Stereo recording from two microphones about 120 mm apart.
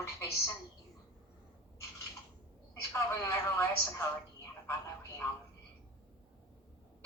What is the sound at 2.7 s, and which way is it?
A woman's voice, 20° left (ahead or behind).